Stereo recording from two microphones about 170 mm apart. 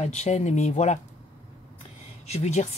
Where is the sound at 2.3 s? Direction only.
40° left (ahead or behind).